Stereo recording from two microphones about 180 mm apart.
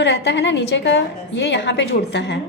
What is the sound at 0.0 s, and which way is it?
A woman's voice, 75° left (ahead or behind).